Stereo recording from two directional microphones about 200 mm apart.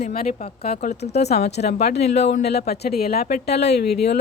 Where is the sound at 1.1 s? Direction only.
35° left (ahead or behind).